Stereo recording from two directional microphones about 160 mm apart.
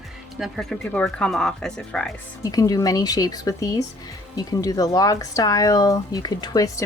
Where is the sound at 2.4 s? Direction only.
20° left (ahead or behind).